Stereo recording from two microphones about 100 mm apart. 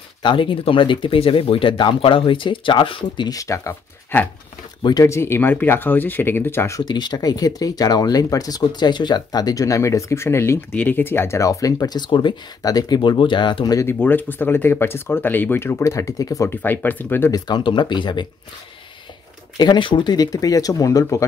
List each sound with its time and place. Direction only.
0.2 s speech: 55° left (ahead or behind)
3.3 s speech: 35° left (ahead or behind)
4.1 s speech: 20° left (ahead or behind)
6.8 s speech: 45° left (ahead or behind)
13.7 s speech: 25° left (ahead or behind)
16.4 s speech: 20° left (ahead or behind)
17.3 s speech: 45° left (ahead or behind)
19.5 s speech: 45° left (ahead or behind)